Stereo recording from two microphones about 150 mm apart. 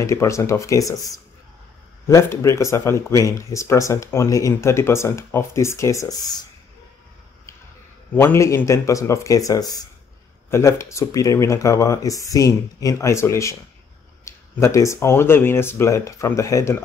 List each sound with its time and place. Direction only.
0.0 s speech: 20° left (ahead or behind)
8.1 s speech: 15° left (ahead or behind)